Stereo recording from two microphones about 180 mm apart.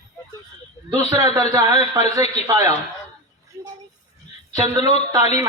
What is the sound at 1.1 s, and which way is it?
Speech, 20° right (ahead or behind).